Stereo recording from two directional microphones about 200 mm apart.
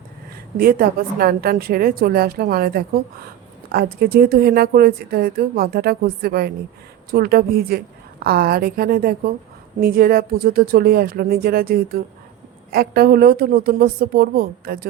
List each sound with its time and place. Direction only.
0.5 s speech: 45° right (ahead or behind)